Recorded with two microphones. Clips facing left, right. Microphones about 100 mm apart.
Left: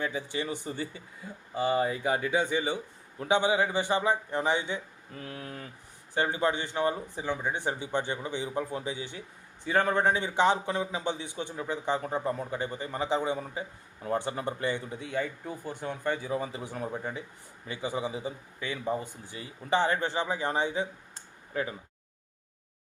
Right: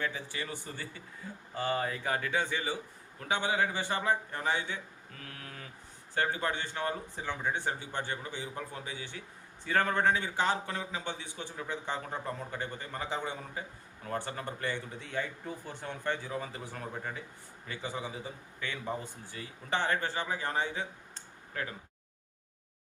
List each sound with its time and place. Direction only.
0.0 s a man's voice: 20° left (ahead or behind)
19.2 s a man's voice: 15° left (ahead or behind)